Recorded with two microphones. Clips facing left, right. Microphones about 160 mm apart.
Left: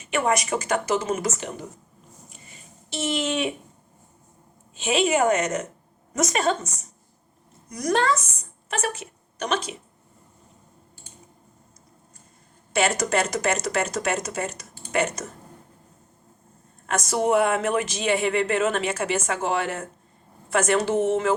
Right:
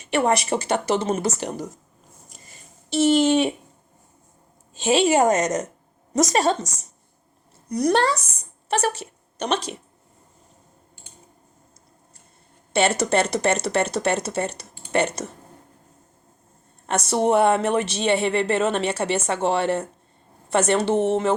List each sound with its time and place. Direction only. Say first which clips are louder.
0.0 s speech: right 3 dB; 35° right (ahead or behind)
3.0 s speech: right 8 dB; 35° right (ahead or behind)
4.7 s speech: right 4 dB; 35° right (ahead or behind)
7.7 s a woman's voice: right 3 dB; 35° right (ahead or behind)
12.7 s speech: right 3 dB; 30° right (ahead or behind)
17.1 s a woman's voice: right 3 dB; 30° right (ahead or behind)